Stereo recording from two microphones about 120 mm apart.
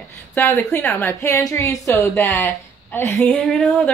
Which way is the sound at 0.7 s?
20° left (ahead or behind).